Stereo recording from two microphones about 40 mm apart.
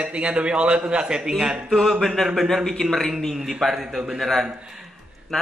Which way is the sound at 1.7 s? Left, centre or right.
Centre.